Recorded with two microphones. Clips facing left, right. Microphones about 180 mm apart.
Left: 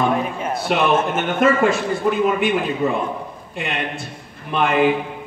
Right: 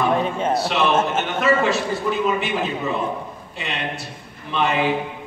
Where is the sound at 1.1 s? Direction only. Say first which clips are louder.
Left 2 dB; 50° left (ahead or behind).